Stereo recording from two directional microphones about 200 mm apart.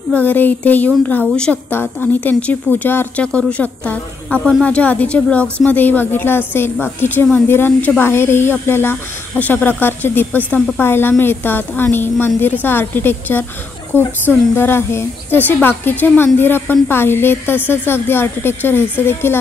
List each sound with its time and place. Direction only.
0.1 s a woman's voice: 10° left (ahead or behind)